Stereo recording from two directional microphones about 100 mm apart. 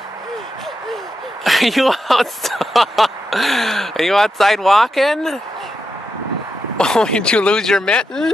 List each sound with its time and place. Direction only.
1.4 s speech: centre (ahead or behind)
6.8 s speech: 5° left (ahead or behind)